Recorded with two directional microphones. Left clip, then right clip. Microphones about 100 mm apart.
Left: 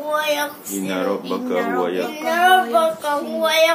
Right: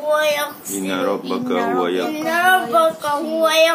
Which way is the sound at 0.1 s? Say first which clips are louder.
Right 3 dB; 40° right (ahead or behind).